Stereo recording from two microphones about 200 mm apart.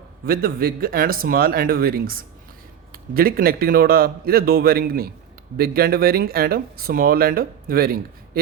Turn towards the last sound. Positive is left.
turn(degrees=-45)  # may be behind; listen again after turning